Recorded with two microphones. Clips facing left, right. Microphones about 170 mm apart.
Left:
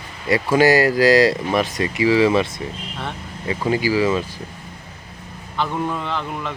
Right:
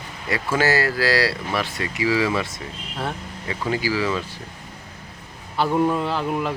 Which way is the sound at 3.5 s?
20° left (ahead or behind).